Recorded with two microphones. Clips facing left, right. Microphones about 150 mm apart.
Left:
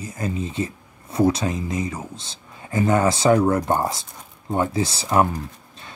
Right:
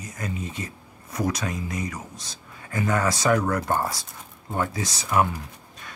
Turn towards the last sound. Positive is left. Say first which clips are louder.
# left 4 dB
turn(degrees=30)  # may be behind; listen again after turning